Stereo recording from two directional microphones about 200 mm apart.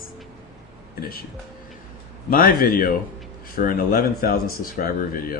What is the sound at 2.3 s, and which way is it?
Speech, 45° left (ahead or behind).